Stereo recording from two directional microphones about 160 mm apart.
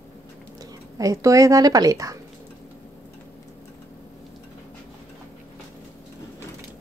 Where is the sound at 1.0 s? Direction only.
20° right (ahead or behind).